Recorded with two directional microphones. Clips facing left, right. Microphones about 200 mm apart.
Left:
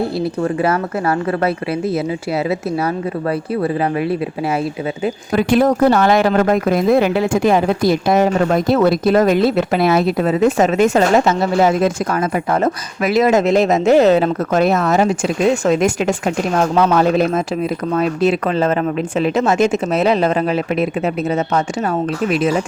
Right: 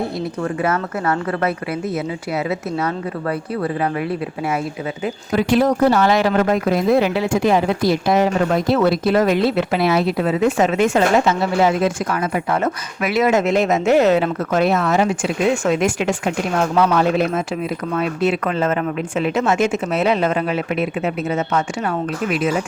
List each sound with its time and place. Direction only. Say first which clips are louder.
0.4 s speech: left 2 dB; 30° left (ahead or behind)
5.3 s speech: left 2 dB; 50° left (ahead or behind); by 22.6 s 35° left (ahead or behind)